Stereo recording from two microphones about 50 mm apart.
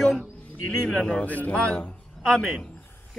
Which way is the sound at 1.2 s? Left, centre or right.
Left.